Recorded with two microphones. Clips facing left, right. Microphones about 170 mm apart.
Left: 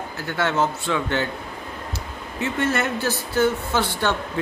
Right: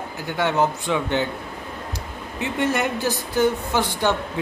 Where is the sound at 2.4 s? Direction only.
15° right (ahead or behind).